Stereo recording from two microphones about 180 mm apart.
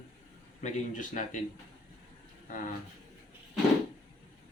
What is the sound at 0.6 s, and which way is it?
Speech, 45° left (ahead or behind).